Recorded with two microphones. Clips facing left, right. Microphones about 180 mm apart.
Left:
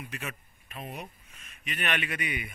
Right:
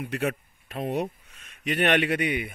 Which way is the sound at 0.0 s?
65° right (ahead or behind).